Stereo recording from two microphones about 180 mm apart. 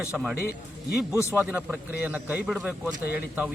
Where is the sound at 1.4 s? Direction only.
10° right (ahead or behind).